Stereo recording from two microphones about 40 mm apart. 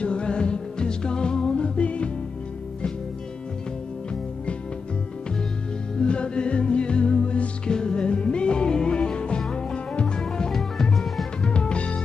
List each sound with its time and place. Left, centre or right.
0.0 s music: left
5.9 s music: left
10.5 s music: centre
11.4 s music: left